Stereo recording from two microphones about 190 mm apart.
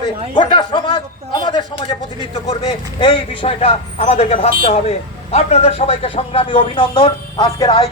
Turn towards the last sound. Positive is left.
turn(degrees=25)  # may be behind; listen again after turning